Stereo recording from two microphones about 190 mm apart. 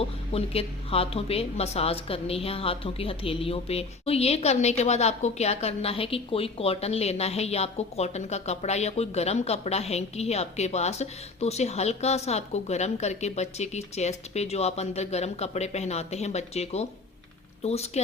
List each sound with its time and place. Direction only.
0.0 s a woman's voice: 30° left (ahead or behind)